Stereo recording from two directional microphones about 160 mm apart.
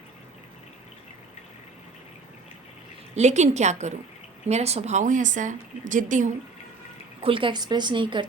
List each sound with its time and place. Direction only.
3.2 s speech: 45° right (ahead or behind)
7.2 s a woman's voice: 35° right (ahead or behind)